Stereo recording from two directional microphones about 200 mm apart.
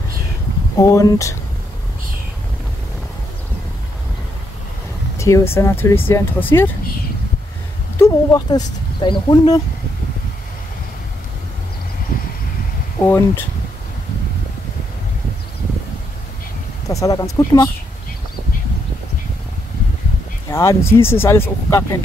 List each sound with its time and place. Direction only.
0.7 s speech: 15° left (ahead or behind)
5.1 s speech: 15° left (ahead or behind)
8.0 s speech: 20° left (ahead or behind)
13.0 s speech: 10° left (ahead or behind)
16.9 s speech: 15° left (ahead or behind)
20.5 s speech: 15° left (ahead or behind)